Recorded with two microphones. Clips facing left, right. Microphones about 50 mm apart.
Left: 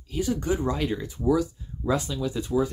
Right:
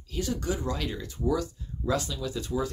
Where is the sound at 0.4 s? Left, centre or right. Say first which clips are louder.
Left 5 dB; left.